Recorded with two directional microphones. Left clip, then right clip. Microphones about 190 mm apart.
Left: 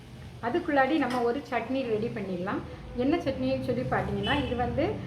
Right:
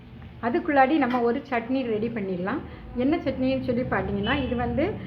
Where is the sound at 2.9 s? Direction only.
15° right (ahead or behind).